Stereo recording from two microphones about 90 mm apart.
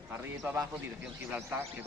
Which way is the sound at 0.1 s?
20° right (ahead or behind).